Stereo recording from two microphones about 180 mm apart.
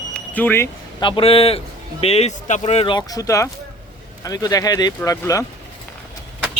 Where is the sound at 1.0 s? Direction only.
30° left (ahead or behind).